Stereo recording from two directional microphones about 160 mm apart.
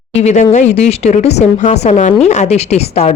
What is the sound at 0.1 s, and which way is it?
A woman's voice, 45° left (ahead or behind).